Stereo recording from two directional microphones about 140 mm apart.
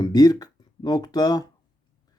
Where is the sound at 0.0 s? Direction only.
30° left (ahead or behind).